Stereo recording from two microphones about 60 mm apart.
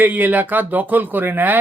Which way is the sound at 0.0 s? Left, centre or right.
Right.